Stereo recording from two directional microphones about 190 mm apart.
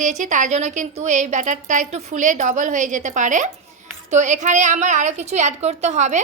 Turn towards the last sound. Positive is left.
turn(degrees=-40)  # may be behind; listen again after turning